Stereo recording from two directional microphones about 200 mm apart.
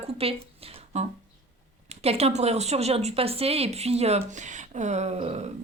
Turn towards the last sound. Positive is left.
turn(degrees=-35)  # may be behind; listen again after turning